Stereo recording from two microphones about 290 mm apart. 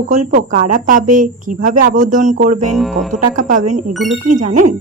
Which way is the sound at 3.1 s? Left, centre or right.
Right.